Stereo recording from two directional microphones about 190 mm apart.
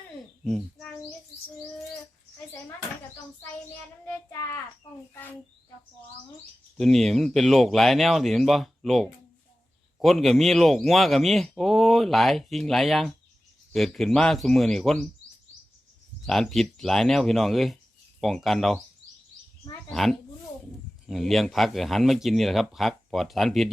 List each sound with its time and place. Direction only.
0.4 s speech: 5° left (ahead or behind)
4.0 s child singing: 15° left (ahead or behind)
6.7 s speech: centre (ahead or behind)
16.2 s speech: centre (ahead or behind)
19.9 s speech: centre (ahead or behind)